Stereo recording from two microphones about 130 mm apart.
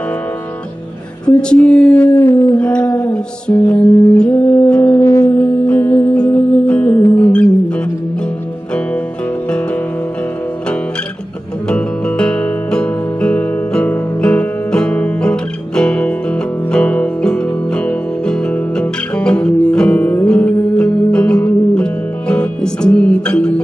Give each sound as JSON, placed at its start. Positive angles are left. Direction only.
{"t": 1.5, "sound": "a sound", "side_deg": 10}
{"t": 3.0, "sound": "music", "side_deg": 10}
{"t": 5.3, "sound": "music", "side_deg": 15}
{"t": 11.7, "sound": "music", "side_deg": 10}